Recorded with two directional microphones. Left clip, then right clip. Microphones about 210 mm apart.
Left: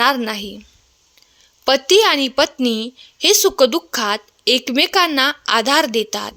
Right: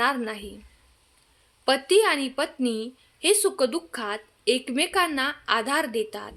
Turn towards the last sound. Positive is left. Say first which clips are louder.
# left 9 dB
turn(degrees=40)  # may be behind; listen again after turning